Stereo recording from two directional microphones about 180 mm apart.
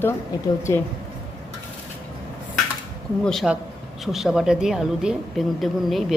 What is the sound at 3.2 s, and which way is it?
A woman's voice, centre (ahead or behind).